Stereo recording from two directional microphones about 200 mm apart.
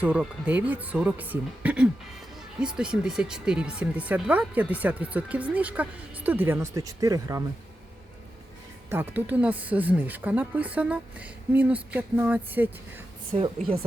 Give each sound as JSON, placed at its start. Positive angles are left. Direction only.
{"t": 0.0, "sound": "speech", "side_deg": -5}
{"t": 8.9, "sound": "speech", "side_deg": -10}
{"t": 13.3, "sound": "a woman's voice", "side_deg": -30}